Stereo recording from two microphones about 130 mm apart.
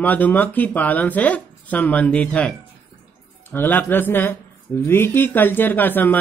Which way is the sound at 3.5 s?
15° left (ahead or behind).